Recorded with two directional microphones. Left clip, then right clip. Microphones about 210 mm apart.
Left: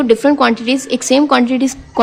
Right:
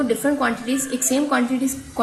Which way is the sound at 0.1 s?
50° left (ahead or behind).